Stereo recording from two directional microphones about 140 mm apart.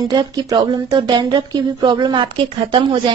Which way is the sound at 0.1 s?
30° right (ahead or behind).